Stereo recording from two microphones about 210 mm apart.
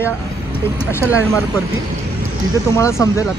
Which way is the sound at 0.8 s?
10° left (ahead or behind).